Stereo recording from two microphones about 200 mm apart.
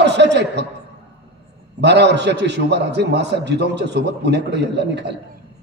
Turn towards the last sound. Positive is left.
turn(degrees=-60)  # may be behind; listen again after turning